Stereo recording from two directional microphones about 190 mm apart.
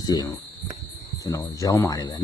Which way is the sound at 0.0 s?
20° left (ahead or behind).